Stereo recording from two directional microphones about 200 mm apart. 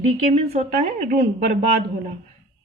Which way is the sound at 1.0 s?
50° right (ahead or behind).